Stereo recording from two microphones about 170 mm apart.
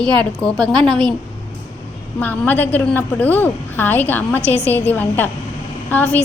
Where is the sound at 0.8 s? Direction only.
25° right (ahead or behind).